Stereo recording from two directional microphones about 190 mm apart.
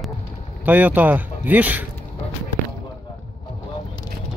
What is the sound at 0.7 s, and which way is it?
Speech, 10° right (ahead or behind).